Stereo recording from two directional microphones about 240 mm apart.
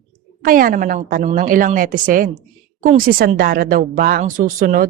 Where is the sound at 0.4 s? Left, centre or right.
Right.